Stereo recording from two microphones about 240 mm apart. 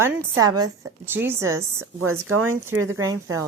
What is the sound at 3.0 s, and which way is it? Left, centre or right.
Speech, centre.